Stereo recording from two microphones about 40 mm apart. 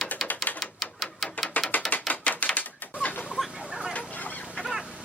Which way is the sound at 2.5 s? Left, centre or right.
Left.